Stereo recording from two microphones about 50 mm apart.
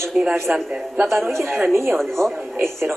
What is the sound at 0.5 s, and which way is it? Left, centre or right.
Speech, right.